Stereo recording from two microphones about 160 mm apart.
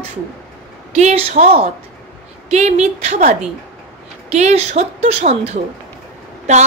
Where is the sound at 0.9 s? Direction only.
45° right (ahead or behind).